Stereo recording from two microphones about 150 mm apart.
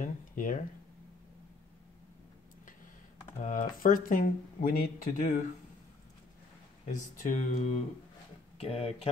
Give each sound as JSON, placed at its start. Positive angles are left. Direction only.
{"t": 0.0, "sound": "speech", "side_deg": 60}
{"t": 3.4, "sound": "speech", "side_deg": 65}
{"t": 7.0, "sound": "speech", "side_deg": 60}
{"t": 8.5, "sound": "speech", "side_deg": 40}